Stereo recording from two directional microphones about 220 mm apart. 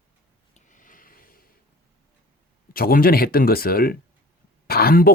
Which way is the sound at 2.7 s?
40° left (ahead or behind).